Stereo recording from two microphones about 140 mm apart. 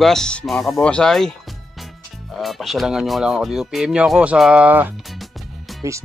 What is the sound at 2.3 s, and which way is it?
Speech, centre (ahead or behind).